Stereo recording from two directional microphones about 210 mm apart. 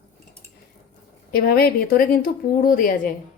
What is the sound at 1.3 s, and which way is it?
Speech, 45° left (ahead or behind).